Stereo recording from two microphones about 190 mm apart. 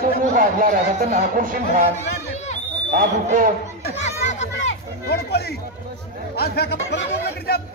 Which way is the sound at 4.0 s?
35° left (ahead or behind).